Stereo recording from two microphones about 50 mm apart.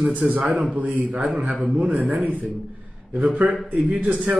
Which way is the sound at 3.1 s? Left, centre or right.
Right.